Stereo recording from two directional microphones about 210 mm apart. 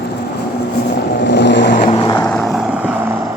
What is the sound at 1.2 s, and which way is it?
Vehicle, 55° left (ahead or behind).